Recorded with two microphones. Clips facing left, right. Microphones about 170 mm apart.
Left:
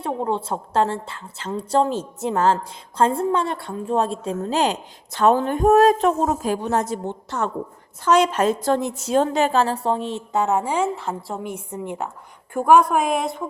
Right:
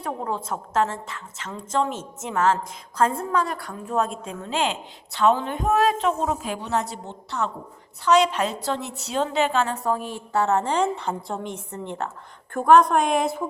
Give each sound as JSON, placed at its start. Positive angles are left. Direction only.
{"t": 0.0, "sound": "a woman's voice", "side_deg": 25}